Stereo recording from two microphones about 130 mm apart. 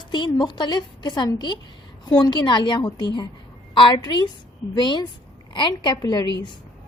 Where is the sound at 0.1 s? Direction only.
35° left (ahead or behind).